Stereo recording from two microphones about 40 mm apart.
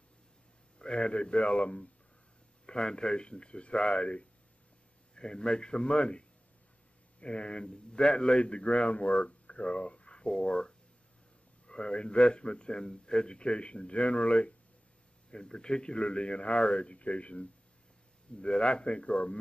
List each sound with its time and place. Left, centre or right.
0.7 s a man's voice: left
2.6 s a man's voice: centre